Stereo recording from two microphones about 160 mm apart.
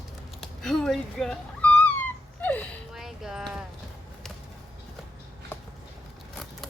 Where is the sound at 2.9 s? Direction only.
5° right (ahead or behind).